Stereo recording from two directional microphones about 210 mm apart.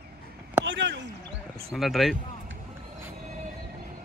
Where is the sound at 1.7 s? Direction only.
Centre (ahead or behind).